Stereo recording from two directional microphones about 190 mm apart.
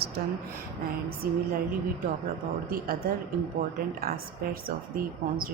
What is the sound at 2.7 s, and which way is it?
Speech, 50° right (ahead or behind).